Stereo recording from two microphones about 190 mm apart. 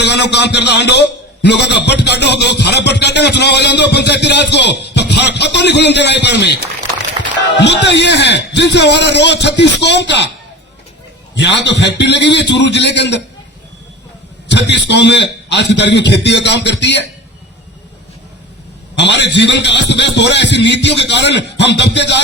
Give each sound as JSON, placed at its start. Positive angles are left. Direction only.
{"t": 0.0, "sound": "a man's voice", "side_deg": 65}
{"t": 7.6, "sound": "a man's voice", "side_deg": 65}
{"t": 11.3, "sound": "a man's voice", "side_deg": 65}
{"t": 14.4, "sound": "a man's voice", "side_deg": 65}
{"t": 18.9, "sound": "a man's voice", "side_deg": 65}